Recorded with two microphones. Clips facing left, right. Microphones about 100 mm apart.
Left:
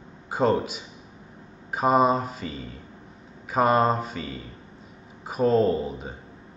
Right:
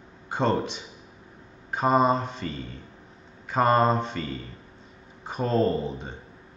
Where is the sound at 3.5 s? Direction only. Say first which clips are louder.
Even; 5° left (ahead or behind).